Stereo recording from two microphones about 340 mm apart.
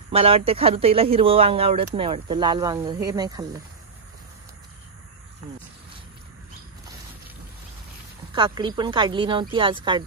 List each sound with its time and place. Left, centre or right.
0.1 s speech: centre
8.4 s speech: centre